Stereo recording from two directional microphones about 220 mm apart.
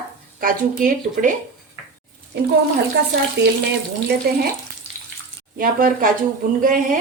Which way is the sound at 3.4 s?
50° right (ahead or behind).